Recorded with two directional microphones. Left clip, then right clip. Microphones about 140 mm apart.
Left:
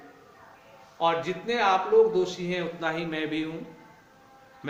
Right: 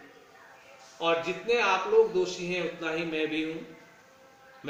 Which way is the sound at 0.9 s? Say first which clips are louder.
Left 2 dB; 25° left (ahead or behind).